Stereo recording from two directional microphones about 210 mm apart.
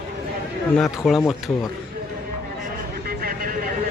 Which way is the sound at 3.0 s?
45° right (ahead or behind).